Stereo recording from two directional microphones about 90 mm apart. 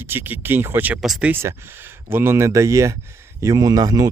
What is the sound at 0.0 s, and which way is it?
Speech, 25° right (ahead or behind).